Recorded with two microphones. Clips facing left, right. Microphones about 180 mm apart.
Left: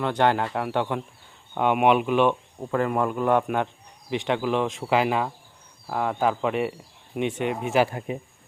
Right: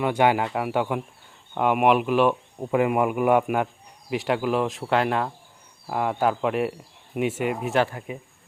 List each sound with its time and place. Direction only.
0.0 s speech: 10° right (ahead or behind)
2.7 s speech: 15° right (ahead or behind)
7.9 s speech: 35° left (ahead or behind)